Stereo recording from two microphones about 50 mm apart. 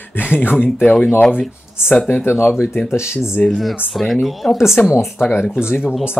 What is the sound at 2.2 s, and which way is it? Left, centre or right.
Speech, left.